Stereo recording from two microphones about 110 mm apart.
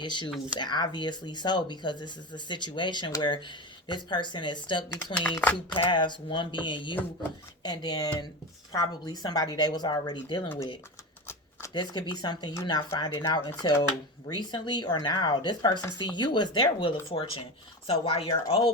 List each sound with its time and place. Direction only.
0.0 s speech: 45° left (ahead or behind)
5.2 s speech: 15° left (ahead or behind)
5.7 s speech: 45° left (ahead or behind)
11.7 s speech: 40° left (ahead or behind); by 18.3 s 60° left (ahead or behind)